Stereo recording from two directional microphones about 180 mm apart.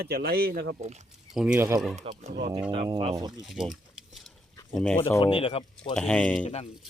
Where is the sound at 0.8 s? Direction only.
40° right (ahead or behind).